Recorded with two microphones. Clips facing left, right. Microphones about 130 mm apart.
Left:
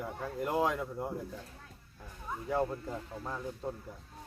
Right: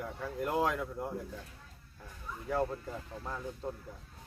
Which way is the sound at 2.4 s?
5° left (ahead or behind).